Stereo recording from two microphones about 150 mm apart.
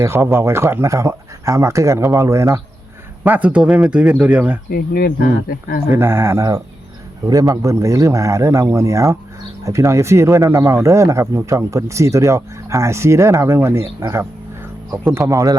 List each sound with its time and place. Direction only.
0.0 s speech: 15° right (ahead or behind)
4.7 s speech: 85° left
5.9 s speech: 15° right (ahead or behind)